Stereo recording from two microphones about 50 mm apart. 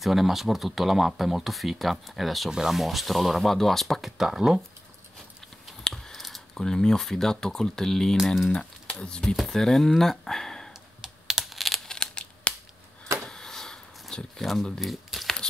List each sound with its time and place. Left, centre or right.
0.0 s speech: centre
6.1 s typing: centre
6.5 s speech: centre
8.5 s a sound: centre
9.0 s speech: centre
10.7 s computer keyboard: centre
12.0 s scissors: centre
13.3 s a sound: centre
14.4 s speech: centre